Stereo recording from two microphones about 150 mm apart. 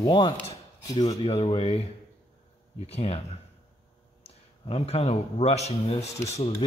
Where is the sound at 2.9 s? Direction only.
45° left (ahead or behind).